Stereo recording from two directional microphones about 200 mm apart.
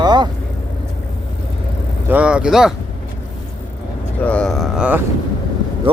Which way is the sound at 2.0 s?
5° right (ahead or behind).